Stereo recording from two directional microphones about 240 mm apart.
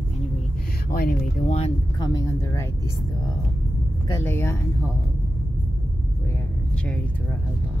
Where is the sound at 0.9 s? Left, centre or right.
Left.